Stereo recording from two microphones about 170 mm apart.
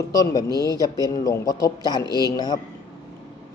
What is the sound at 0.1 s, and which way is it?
A man's voice, 20° left (ahead or behind).